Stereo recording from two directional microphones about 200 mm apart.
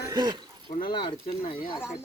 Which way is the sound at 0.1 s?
20° right (ahead or behind).